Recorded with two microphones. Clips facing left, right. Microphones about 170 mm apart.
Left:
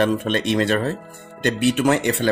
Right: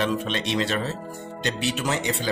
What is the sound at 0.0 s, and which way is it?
A man's voice, 50° left (ahead or behind).